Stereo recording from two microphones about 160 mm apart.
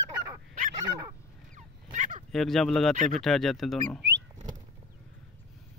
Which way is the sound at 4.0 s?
90° right.